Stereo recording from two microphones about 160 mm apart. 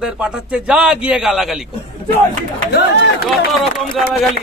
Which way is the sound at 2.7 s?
90° left.